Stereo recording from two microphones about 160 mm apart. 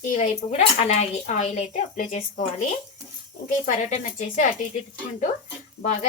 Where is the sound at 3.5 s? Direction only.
50° left (ahead or behind).